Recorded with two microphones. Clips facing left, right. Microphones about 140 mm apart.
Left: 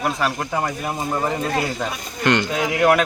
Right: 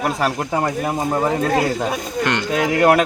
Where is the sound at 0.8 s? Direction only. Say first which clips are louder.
Right 4 dB; 50° right (ahead or behind).